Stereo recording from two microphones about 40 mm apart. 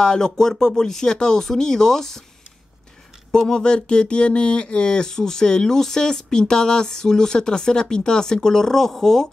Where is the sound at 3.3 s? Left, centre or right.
Centre.